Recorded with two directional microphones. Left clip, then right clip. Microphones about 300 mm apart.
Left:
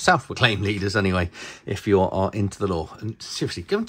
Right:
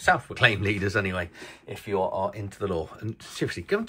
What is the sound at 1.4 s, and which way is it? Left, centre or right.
Speech, left.